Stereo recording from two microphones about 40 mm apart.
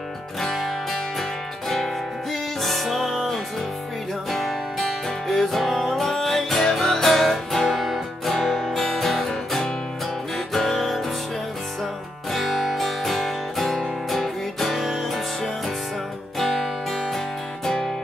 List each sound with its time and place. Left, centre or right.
0.4 s music: centre
2.6 s music: centre
12.3 s music: centre
17.6 s music: centre